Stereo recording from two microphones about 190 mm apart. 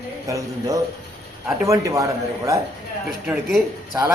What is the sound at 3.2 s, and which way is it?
Speech, 5° right (ahead or behind).